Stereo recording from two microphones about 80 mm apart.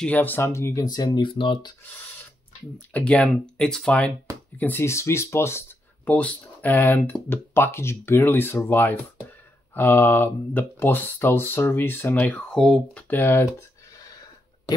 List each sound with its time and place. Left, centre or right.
0.0 s speech: left
0.5 s speech: left
0.9 s speech: left
1.2 s speech: left
2.9 s speech: centre
4.6 s speech: left
4.8 s speech: left
6.0 s speech: centre
12.2 s speech: centre
13.1 s speech: left
13.6 s a sound: left